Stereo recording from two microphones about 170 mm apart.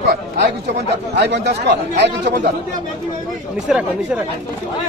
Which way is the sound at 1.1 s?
90° right.